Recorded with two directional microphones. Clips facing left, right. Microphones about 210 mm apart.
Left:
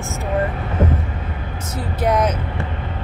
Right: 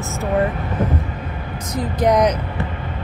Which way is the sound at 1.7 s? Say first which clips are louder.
Right 3 dB; 5° left (ahead or behind).